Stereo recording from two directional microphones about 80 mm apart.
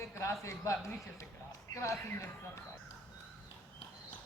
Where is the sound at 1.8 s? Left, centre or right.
Left.